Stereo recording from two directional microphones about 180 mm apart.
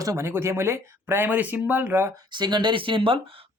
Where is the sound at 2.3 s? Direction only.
25° right (ahead or behind).